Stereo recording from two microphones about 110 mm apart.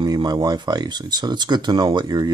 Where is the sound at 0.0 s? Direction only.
40° right (ahead or behind).